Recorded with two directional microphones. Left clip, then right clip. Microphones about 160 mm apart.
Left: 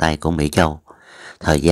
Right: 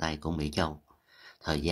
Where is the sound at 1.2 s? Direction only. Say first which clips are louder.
Left 15 dB; 40° left (ahead or behind).